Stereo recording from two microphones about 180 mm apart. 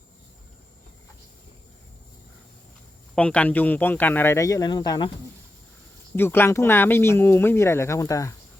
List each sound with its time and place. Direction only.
3.2 s speech: 5° left (ahead or behind); by 5.1 s 25° left (ahead or behind)
6.1 s speech: 10° left (ahead or behind)